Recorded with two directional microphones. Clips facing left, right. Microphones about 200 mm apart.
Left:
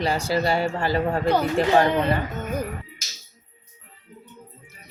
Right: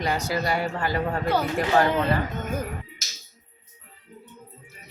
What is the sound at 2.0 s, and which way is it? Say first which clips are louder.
Speech: left 1 dB; 10° left (ahead or behind).